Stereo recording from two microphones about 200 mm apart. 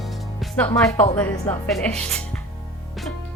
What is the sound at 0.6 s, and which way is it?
Speech, 10° left (ahead or behind).